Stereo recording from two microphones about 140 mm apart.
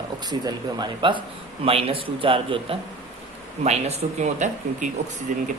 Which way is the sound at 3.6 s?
50° right (ahead or behind).